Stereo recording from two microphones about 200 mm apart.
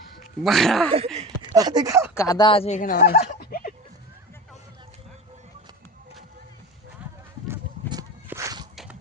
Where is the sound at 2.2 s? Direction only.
20° left (ahead or behind); by 3.7 s 50° left (ahead or behind).